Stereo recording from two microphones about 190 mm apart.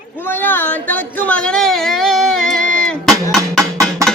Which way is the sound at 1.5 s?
Centre (ahead or behind).